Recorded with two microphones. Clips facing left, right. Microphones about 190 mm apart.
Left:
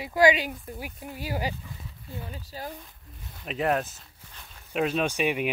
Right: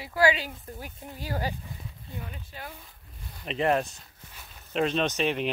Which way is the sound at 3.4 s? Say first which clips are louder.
Right 1 dB; centre (ahead or behind).